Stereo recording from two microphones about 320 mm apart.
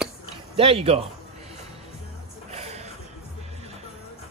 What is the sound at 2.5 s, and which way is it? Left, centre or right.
Music, centre.